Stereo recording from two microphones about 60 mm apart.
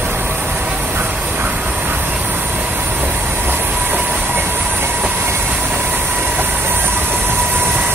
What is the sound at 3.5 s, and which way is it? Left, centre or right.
Train, right.